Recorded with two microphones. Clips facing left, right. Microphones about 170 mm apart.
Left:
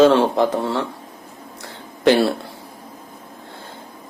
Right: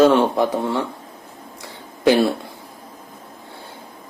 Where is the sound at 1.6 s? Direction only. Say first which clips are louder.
Left 1 dB; 15° right (ahead or behind).